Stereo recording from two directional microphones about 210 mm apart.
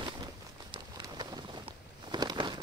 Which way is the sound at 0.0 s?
20° right (ahead or behind).